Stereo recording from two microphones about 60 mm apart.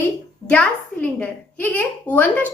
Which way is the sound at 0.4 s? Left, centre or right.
Centre.